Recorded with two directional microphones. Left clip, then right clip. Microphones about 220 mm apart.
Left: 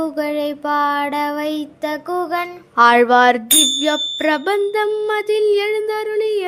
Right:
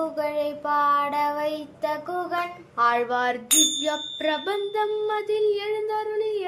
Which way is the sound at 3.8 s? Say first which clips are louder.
Left 8 dB; 45° left (ahead or behind).